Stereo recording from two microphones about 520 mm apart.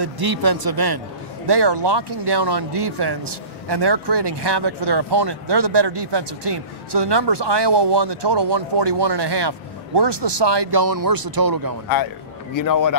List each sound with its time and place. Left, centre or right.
0.0 s speech: right
12.5 s a man's voice: left